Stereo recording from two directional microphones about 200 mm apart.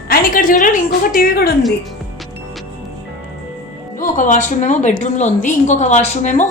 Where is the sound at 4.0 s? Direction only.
40° left (ahead or behind).